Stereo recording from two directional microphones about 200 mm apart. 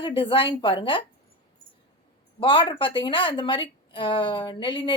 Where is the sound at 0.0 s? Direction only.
25° left (ahead or behind).